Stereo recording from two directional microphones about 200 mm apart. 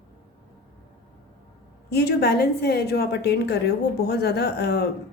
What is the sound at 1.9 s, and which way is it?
A woman's voice, 55° left (ahead or behind).